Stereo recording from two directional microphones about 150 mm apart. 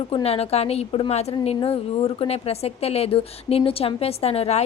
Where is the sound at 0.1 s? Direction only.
40° left (ahead or behind).